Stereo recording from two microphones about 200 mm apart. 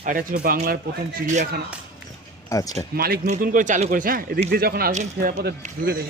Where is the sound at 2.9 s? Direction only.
50° right (ahead or behind).